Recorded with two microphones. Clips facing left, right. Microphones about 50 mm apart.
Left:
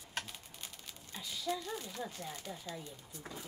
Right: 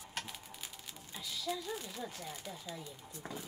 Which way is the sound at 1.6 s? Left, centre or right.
Centre.